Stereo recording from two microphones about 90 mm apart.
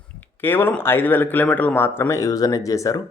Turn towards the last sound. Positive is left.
turn(degrees=35)  # may be behind; listen again after turning